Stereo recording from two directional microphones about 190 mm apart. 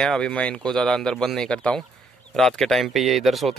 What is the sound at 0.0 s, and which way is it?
Speech, 5° left (ahead or behind).